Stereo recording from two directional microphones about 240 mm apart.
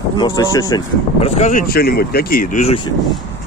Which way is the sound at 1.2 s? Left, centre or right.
Left.